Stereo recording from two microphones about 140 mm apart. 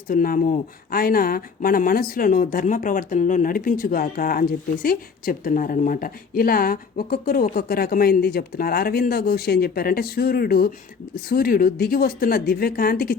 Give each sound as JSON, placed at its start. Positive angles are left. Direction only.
{"t": 0.1, "sound": "speech", "side_deg": 80}